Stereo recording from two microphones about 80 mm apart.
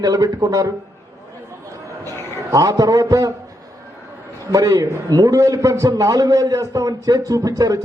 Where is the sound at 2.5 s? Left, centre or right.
Right.